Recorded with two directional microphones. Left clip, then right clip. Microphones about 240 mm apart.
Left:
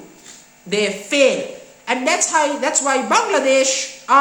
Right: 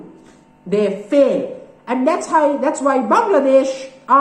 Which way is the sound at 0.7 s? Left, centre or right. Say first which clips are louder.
Right 3 dB; centre.